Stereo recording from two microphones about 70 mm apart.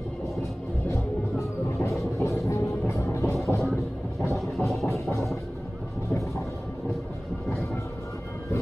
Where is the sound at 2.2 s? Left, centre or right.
Left.